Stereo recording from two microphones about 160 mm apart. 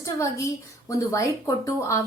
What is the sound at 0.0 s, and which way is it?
A woman's voice, 20° left (ahead or behind).